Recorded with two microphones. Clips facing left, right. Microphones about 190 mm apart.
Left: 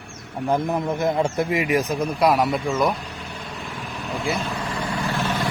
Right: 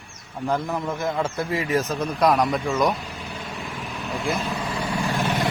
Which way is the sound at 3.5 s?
Centre (ahead or behind).